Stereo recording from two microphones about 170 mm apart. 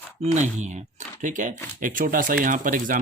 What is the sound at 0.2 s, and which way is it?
Speech, 45° right (ahead or behind).